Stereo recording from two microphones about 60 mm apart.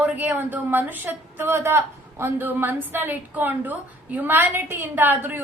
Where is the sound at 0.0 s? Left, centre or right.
Right.